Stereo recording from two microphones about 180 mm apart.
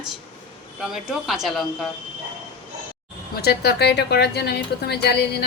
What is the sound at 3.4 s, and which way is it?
A woman's voice, 65° left (ahead or behind).